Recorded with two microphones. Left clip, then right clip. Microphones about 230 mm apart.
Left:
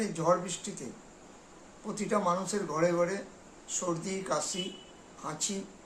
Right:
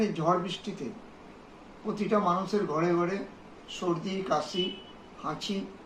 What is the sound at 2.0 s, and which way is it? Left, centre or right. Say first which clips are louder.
Speech: right 2 dB; centre.